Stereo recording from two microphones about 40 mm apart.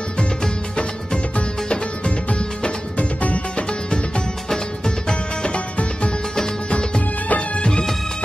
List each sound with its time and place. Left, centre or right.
0.7 s music: left
4.5 s music: centre
7.2 s music of bollywood: left